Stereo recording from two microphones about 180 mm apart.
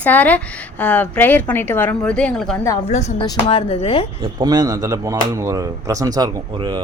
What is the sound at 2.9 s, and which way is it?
Speech, 40° left (ahead or behind).